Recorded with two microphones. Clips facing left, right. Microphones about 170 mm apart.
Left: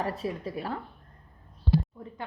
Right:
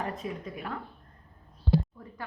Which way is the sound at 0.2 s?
35° left (ahead or behind).